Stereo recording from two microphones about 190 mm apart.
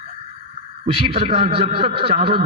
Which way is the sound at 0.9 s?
30° right (ahead or behind).